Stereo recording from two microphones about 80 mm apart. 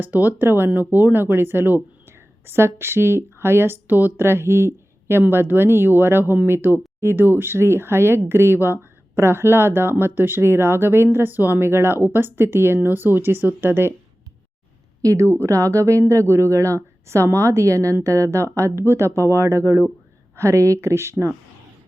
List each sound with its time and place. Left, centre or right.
0.0 s a woman's voice: right
15.0 s a woman's voice: right